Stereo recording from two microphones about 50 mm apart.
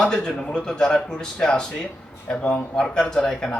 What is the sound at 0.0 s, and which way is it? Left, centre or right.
Speech, centre.